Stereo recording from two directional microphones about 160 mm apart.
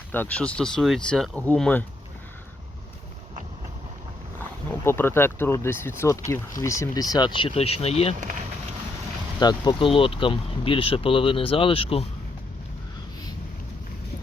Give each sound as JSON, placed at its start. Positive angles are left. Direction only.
{"t": 0.1, "sound": "speech", "side_deg": 10}
{"t": 4.7, "sound": "speech", "side_deg": 15}
{"t": 9.4, "sound": "speech", "side_deg": 25}